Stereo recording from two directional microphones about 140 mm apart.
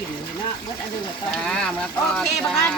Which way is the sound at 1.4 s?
5° left (ahead or behind).